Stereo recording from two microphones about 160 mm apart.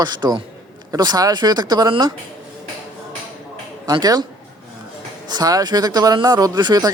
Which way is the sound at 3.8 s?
25° right (ahead or behind).